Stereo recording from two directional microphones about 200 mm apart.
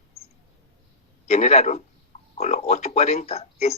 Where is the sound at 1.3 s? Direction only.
35° left (ahead or behind).